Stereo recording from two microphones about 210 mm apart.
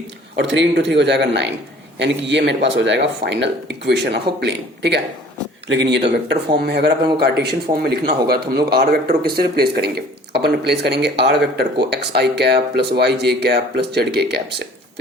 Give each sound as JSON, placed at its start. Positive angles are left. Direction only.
{"t": 0.5, "sound": "speech", "side_deg": -60}